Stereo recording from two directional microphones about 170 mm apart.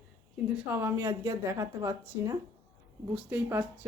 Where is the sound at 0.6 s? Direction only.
15° right (ahead or behind).